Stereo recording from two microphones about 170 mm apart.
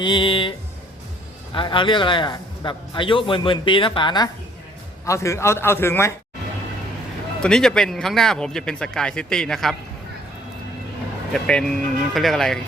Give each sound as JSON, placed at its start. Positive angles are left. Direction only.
{"t": 0.0, "sound": "a man's voice", "side_deg": 30}
{"t": 1.5, "sound": "a man's voice", "side_deg": 30}
{"t": 7.4, "sound": "speech", "side_deg": 5}
{"t": 11.3, "sound": "speech", "side_deg": 5}